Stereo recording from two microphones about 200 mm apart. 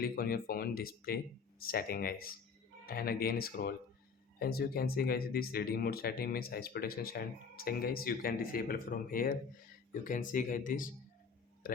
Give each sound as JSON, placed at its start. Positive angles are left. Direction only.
{"t": 0.0, "sound": "speech", "side_deg": 50}